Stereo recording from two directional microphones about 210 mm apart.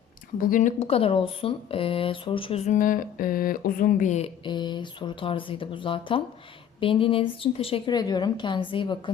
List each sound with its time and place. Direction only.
0.3 s speech: 40° left (ahead or behind)
4.4 s a woman's voice: 20° left (ahead or behind)